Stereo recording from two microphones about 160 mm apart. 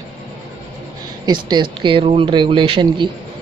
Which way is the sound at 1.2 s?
25° right (ahead or behind).